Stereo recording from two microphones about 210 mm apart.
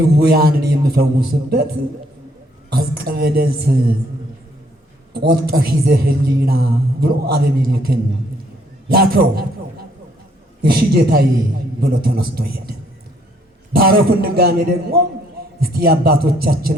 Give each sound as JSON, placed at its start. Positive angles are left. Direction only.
{"t": 0.0, "sound": "a man's voice", "side_deg": -50}
{"t": 5.1, "sound": "a man's voice", "side_deg": -45}
{"t": 10.6, "sound": "a man's voice", "side_deg": -45}
{"t": 13.7, "sound": "a man's voice", "side_deg": -45}